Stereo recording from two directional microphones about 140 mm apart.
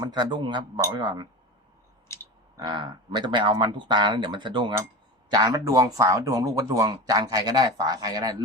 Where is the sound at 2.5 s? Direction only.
30° right (ahead or behind).